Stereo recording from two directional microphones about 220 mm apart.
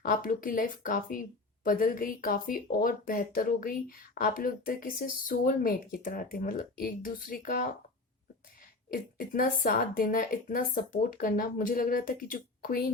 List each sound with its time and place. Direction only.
0.0 s speech: 40° left (ahead or behind)
8.9 s speech: 40° left (ahead or behind)